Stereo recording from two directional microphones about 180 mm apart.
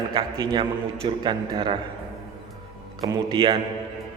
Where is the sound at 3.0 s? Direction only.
25° right (ahead or behind).